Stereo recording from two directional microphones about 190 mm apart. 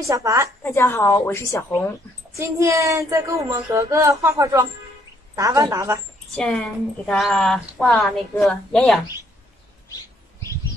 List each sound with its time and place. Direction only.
0.0 s speech: 15° right (ahead or behind)
0.7 s a woman's voice: 10° left (ahead or behind)
2.3 s speech: 15° right (ahead or behind)
6.3 s a woman's voice: 5° left (ahead or behind)